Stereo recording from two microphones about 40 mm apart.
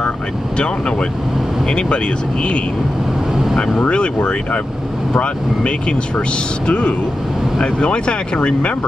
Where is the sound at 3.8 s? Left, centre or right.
Left.